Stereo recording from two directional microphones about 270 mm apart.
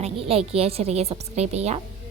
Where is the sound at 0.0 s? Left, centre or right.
Right.